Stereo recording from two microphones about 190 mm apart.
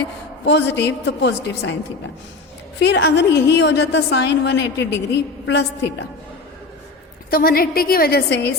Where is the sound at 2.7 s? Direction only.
65° left (ahead or behind).